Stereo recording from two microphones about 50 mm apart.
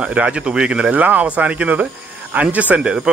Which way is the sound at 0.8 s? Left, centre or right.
Right.